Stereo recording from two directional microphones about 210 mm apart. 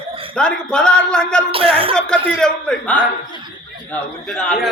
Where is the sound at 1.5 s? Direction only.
25° right (ahead or behind).